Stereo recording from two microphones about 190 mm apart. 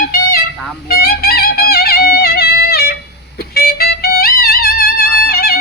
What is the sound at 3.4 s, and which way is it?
Music, 55° left (ahead or behind).